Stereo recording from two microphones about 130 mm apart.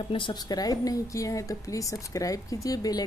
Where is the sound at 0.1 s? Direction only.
35° left (ahead or behind).